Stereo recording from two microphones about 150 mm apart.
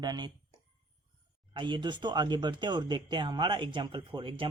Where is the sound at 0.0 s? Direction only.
25° right (ahead or behind).